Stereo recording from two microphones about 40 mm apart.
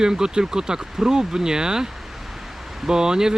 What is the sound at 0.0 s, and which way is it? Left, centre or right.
Speech, centre.